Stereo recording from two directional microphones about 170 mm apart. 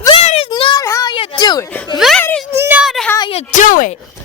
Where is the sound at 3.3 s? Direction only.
45° left (ahead or behind).